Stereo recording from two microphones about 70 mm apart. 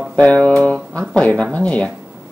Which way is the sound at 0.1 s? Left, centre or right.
Centre.